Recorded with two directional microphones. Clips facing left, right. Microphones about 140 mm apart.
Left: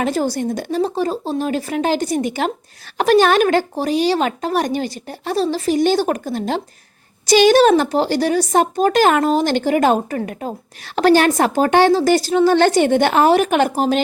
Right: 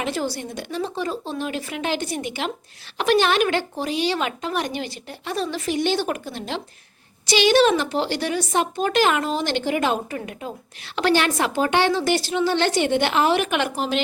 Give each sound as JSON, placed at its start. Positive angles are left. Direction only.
{"t": 0.0, "sound": "speech", "side_deg": 45}